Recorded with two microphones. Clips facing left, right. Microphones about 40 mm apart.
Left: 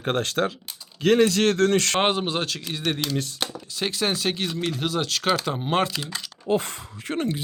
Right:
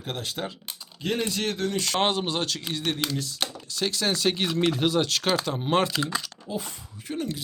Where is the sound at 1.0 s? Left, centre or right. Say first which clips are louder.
Left 9 dB; left.